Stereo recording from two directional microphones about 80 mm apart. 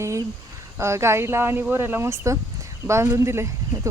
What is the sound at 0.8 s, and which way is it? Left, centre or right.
Speech, right.